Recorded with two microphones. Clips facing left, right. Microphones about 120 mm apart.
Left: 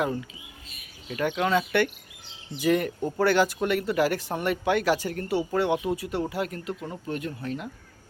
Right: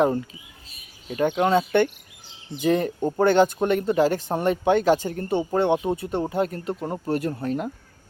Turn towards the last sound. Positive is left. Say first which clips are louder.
# right 7 dB
turn(degrees=-45)  # may be behind; listen again after turning